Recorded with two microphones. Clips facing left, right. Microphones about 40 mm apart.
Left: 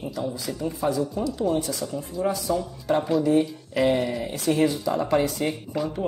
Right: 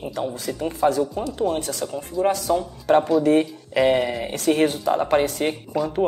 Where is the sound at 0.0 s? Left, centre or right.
Right.